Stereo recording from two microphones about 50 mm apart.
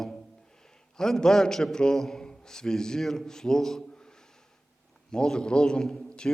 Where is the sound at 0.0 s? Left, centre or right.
Centre.